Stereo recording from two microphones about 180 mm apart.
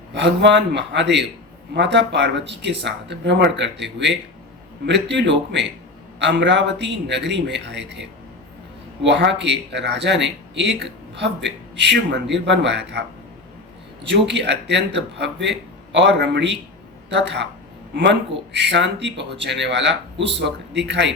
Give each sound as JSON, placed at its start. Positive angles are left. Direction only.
{"t": 0.1, "sound": "a man's voice", "side_deg": -80}
{"t": 4.9, "sound": "speech", "side_deg": -75}
{"t": 9.0, "sound": "a man's voice", "side_deg": -75}
{"t": 14.3, "sound": "a man's voice", "side_deg": -80}